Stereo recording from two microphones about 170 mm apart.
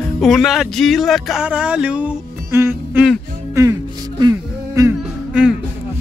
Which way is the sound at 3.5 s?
20° right (ahead or behind).